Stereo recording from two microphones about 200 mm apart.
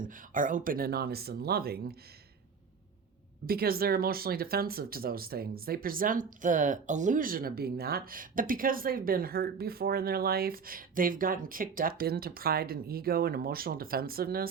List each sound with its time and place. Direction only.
0.0 s speech: 40° right (ahead or behind)
3.4 s speech: 50° right (ahead or behind)